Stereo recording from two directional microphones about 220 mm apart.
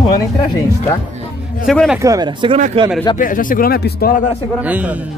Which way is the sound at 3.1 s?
40° left (ahead or behind).